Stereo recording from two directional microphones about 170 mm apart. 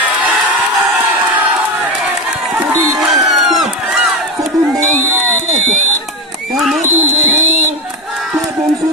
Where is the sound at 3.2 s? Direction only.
Centre (ahead or behind).